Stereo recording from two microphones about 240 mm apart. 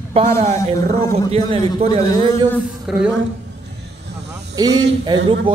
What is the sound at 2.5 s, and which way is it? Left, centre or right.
Speech, centre.